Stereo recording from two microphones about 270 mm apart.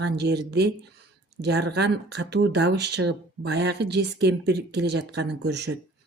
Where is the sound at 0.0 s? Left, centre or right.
Right.